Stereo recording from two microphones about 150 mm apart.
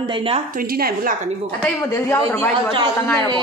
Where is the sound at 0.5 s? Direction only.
80° right.